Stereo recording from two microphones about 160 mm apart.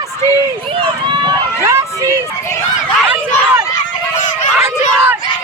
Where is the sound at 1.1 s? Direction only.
25° right (ahead or behind).